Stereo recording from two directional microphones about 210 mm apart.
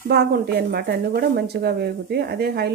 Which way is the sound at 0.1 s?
50° right (ahead or behind).